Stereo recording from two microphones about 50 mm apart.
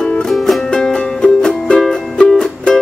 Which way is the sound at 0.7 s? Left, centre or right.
Centre.